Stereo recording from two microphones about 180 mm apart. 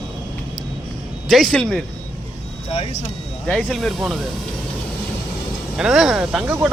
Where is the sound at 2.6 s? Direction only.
35° left (ahead or behind).